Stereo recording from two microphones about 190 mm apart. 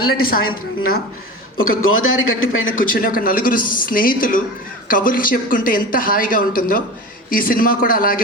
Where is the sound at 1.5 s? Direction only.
90° left.